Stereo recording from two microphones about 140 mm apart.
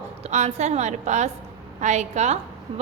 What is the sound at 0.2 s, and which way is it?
A woman's voice, 55° right (ahead or behind).